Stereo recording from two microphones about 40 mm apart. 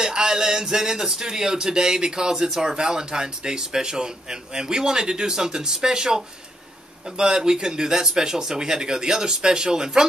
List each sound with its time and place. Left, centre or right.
0.0 s speech: centre